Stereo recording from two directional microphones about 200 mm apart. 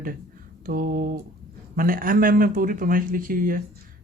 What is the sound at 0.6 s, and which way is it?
Speech, 40° right (ahead or behind).